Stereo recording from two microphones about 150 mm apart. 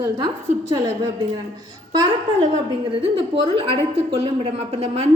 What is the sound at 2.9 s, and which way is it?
A woman's voice, 35° right (ahead or behind).